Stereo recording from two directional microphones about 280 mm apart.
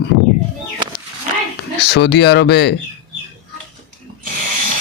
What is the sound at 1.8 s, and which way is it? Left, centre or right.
Speech, left.